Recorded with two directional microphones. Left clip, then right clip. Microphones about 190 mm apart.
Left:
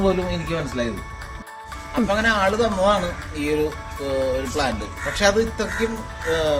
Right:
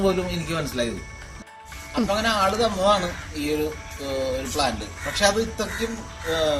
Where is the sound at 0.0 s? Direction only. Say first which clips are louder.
Left 2 dB; centre (ahead or behind).